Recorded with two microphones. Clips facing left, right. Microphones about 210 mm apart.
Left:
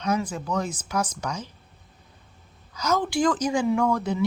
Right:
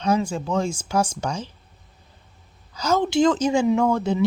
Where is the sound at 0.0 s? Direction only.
30° right (ahead or behind).